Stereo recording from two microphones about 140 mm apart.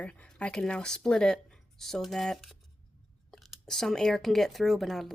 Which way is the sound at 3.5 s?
5° left (ahead or behind).